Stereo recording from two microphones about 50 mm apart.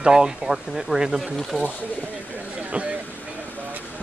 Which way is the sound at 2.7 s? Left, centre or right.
Right.